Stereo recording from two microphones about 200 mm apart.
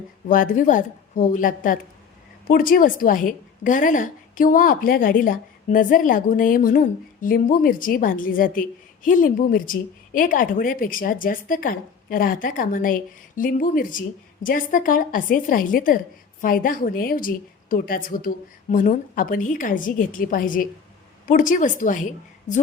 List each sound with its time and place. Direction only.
0.3 s a woman's voice: 40° left (ahead or behind)